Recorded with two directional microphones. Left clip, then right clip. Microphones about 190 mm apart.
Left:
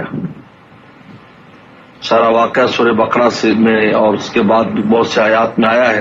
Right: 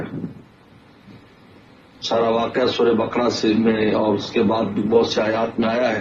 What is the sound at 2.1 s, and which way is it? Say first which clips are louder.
A man's voice: left 9 dB; 30° left (ahead or behind).